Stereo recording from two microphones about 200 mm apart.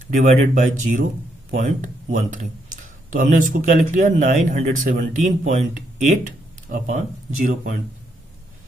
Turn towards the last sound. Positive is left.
turn(degrees=-40)  # may be behind; listen again after turning